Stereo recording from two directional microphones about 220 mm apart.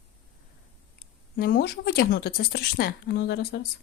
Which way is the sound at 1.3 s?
45° left (ahead or behind).